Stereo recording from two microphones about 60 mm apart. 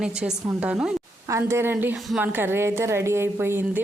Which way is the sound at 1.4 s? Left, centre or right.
Right.